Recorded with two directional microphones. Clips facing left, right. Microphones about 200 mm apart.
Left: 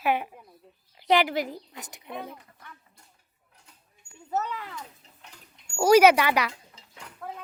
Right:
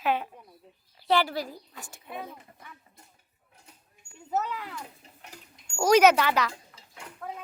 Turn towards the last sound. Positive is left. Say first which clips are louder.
# even
turn(degrees=0)  # may be behind; listen again after turning